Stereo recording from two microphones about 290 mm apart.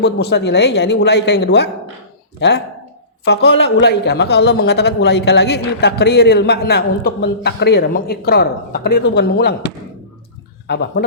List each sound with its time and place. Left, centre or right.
0.0 s a man's voice: left